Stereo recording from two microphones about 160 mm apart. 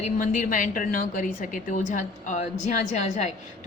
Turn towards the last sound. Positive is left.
turn(degrees=45)  # may be behind; listen again after turning